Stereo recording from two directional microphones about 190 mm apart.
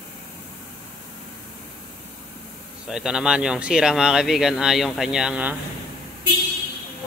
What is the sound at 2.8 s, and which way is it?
Speech, 5° right (ahead or behind).